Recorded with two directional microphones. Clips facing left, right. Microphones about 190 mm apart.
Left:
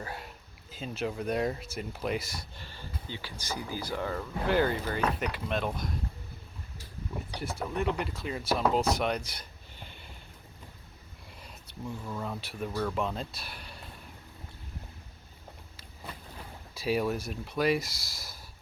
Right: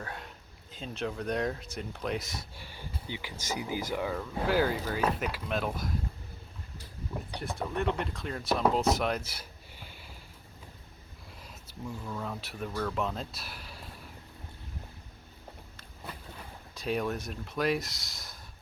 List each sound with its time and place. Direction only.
0.0 s speech: 5° left (ahead or behind)
2.6 s speech: 10° right (ahead or behind)
3.9 s speech: 5° right (ahead or behind)
7.3 s speech: centre (ahead or behind)
11.4 s speech: 5° left (ahead or behind)
16.7 s speech: 5° left (ahead or behind)